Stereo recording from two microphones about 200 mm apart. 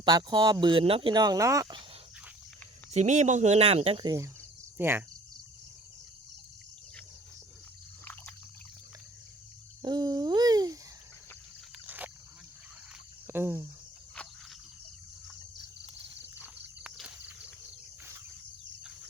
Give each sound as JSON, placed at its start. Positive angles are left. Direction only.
{"t": 0.0, "sound": "speech", "side_deg": -20}
{"t": 2.9, "sound": "speech", "side_deg": -35}
{"t": 9.8, "sound": "babbling", "side_deg": -20}
{"t": 11.9, "sound": "wild animals", "side_deg": -10}
{"t": 13.2, "sound": "speech", "side_deg": -10}
{"t": 16.3, "sound": "a sound", "side_deg": -5}